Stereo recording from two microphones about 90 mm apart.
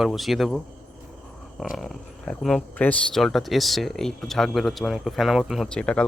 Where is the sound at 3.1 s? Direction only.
5° left (ahead or behind).